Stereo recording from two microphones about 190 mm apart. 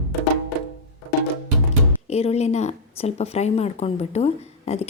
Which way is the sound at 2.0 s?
35° left (ahead or behind).